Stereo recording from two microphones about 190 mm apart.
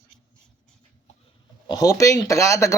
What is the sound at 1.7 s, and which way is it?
Speech, 20° left (ahead or behind).